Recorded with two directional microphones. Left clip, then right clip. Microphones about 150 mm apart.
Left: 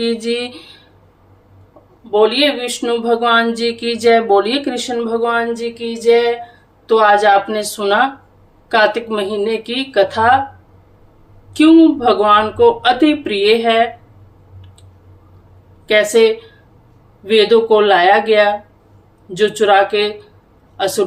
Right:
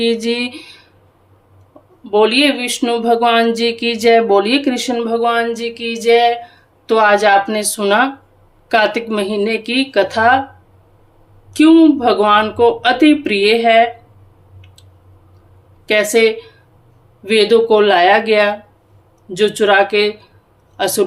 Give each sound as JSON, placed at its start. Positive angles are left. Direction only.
{"t": 0.0, "sound": "speech", "side_deg": -30}
{"t": 2.0, "sound": "speech", "side_deg": -35}
{"t": 11.5, "sound": "speech", "side_deg": -30}
{"t": 16.2, "sound": "speech", "side_deg": -30}